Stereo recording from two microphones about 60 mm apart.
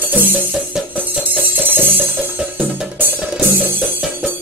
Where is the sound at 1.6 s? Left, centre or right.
Right.